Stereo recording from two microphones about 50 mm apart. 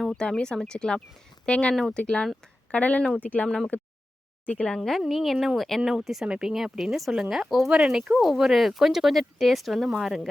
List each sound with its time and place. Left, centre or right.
0.1 s speech: centre
3.7 s a sound: left
4.4 s speech: centre
4.8 s speech: centre
5.8 s speech: centre